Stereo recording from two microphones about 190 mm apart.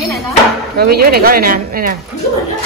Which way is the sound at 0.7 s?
55° right (ahead or behind).